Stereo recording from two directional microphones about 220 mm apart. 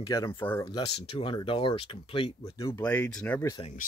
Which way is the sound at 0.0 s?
20° left (ahead or behind).